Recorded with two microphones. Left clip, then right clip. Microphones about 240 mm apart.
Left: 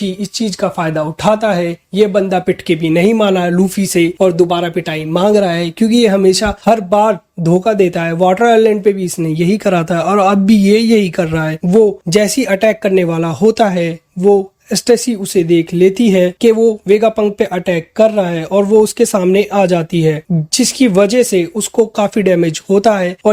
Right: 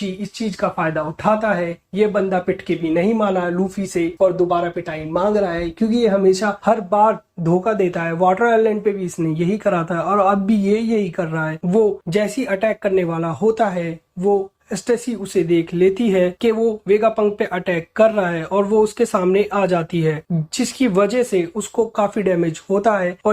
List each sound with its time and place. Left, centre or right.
0.2 s speech: left